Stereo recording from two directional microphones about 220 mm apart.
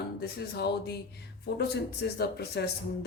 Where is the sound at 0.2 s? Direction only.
45° left (ahead or behind).